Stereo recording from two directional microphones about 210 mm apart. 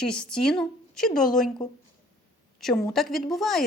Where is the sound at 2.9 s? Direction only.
Centre (ahead or behind).